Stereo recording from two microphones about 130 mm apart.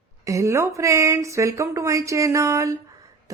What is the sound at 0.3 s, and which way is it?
A woman's voice, 25° right (ahead or behind).